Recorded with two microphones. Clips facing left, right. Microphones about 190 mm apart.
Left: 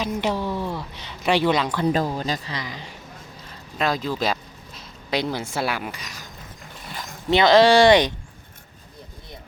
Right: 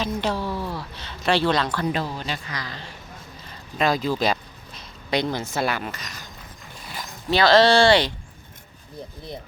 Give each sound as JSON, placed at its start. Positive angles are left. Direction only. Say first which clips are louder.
{"t": 0.0, "sound": "a woman's voice", "louder": "left 1 dB", "side_deg": 15}
{"t": 1.9, "sound": "speech", "louder": "left 4 dB", "side_deg": 40}
{"t": 2.5, "sound": "a woman's voice", "louder": "left 2 dB", "side_deg": 20}
{"t": 3.8, "sound": "speech", "louder": "right 2 dB", "side_deg": 0}
{"t": 7.3, "sound": "a woman's voice", "louder": "left 2 dB", "side_deg": 20}